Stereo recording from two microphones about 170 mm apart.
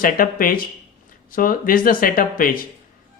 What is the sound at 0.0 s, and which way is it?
Speech, 55° left (ahead or behind).